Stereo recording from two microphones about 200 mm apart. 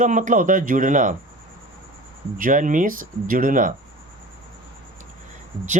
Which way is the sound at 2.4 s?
40° right (ahead or behind).